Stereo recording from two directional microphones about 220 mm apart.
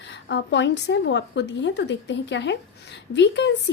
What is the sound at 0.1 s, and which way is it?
A woman's voice, 50° left (ahead or behind).